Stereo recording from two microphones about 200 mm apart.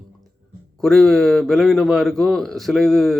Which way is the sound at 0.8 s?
Centre (ahead or behind).